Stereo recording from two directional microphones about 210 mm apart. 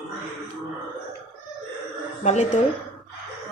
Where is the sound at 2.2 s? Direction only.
35° left (ahead or behind).